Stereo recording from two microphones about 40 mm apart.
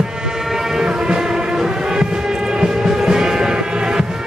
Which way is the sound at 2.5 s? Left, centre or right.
Centre.